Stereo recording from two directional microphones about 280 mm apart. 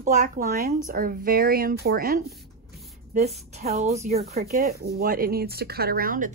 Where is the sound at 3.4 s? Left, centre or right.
Right.